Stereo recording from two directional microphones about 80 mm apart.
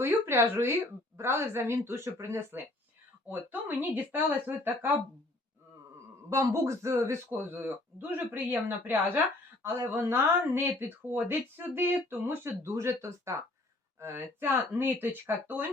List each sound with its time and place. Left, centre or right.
0.0 s a woman's voice: right
3.3 s speech: right
6.3 s a woman's voice: right